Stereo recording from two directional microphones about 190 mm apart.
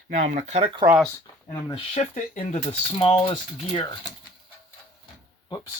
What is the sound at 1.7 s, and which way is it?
Speech, 35° left (ahead or behind).